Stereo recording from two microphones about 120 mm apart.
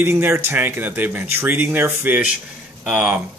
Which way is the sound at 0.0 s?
20° right (ahead or behind).